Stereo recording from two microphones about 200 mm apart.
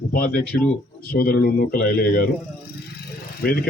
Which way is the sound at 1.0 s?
50° left (ahead or behind).